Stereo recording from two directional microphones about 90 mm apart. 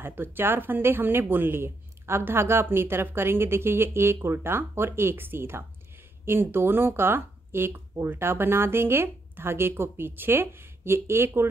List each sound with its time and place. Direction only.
0.0 s speech: 20° right (ahead or behind)